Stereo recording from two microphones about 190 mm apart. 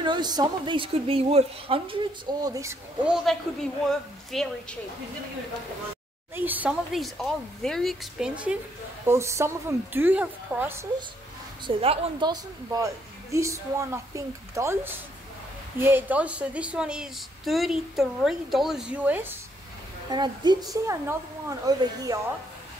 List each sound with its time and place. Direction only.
0.0 s a woman's voice: 25° right (ahead or behind)
2.4 s a woman's voice: 15° right (ahead or behind)
3.3 s a woman's voice: centre (ahead or behind)
6.3 s a woman's voice: 10° right (ahead or behind)
11.6 s a woman's voice: 25° right (ahead or behind); by 19.3 s 10° right (ahead or behind)
20.1 s a woman's voice: 25° right (ahead or behind)